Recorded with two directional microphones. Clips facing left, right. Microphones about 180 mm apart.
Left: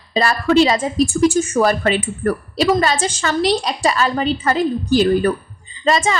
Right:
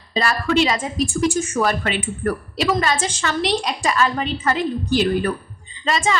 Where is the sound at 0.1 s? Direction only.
35° left (ahead or behind).